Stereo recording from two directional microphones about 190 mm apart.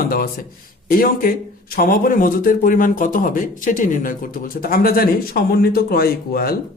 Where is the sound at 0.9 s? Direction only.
50° left (ahead or behind).